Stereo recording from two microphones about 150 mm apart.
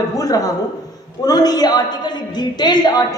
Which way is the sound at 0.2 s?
25° left (ahead or behind).